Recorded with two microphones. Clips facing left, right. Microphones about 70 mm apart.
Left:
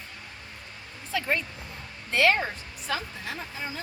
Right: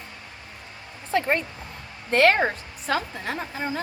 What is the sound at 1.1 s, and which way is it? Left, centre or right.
Speech, right.